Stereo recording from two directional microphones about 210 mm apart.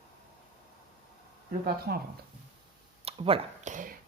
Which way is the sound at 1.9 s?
50° right (ahead or behind).